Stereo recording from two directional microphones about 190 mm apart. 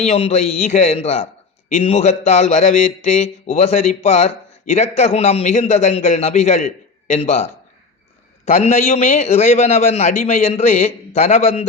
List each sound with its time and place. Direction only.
0.0 s speech: 35° left (ahead or behind)